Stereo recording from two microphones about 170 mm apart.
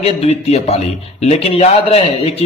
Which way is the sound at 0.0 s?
40° left (ahead or behind).